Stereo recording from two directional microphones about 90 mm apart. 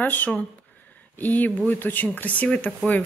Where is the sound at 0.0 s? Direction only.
20° left (ahead or behind).